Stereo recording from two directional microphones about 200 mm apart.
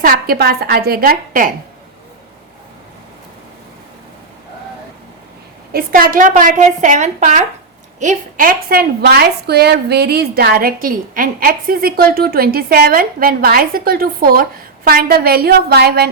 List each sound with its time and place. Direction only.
0.0 s a woman's voice: 45° right (ahead or behind)
5.7 s a woman's voice: 45° right (ahead or behind)